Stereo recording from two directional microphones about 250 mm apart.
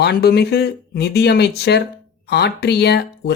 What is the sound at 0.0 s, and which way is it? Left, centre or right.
Speech, left.